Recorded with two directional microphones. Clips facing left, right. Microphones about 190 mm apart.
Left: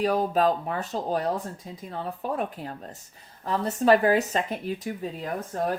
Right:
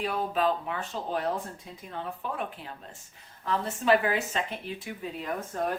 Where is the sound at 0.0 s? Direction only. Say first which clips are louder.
Left 5 dB; 40° left (ahead or behind).